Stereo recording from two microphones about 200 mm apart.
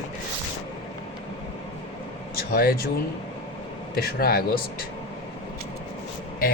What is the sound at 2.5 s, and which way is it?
Speech, 50° left (ahead or behind).